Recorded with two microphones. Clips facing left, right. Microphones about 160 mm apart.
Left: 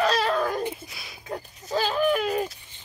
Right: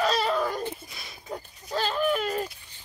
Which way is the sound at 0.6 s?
10° left (ahead or behind).